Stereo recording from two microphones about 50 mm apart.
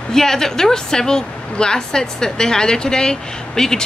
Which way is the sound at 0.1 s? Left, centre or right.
Centre.